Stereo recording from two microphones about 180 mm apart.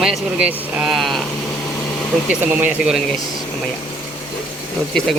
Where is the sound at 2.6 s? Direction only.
5° right (ahead or behind).